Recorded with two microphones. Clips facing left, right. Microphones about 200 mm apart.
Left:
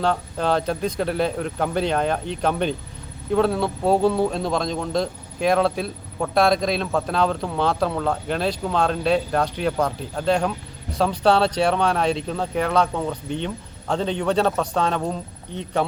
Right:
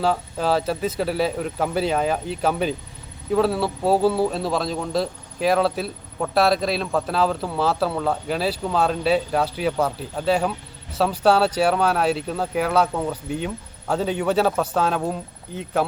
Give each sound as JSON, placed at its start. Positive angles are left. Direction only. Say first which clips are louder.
{"t": 0.0, "sound": "speech", "louder": "even", "side_deg": -5}